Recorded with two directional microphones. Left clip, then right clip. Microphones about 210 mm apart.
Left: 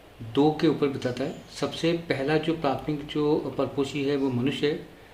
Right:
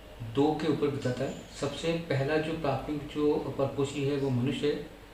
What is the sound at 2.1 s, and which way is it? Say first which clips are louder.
Speech: left 4 dB; 55° left (ahead or behind).